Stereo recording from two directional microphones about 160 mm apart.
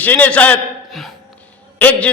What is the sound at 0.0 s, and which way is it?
A man's voice, 10° left (ahead or behind).